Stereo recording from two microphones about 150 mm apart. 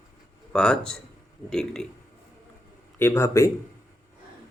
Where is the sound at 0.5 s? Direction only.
5° left (ahead or behind).